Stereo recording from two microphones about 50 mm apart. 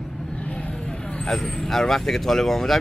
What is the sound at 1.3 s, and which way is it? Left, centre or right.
Speech, centre.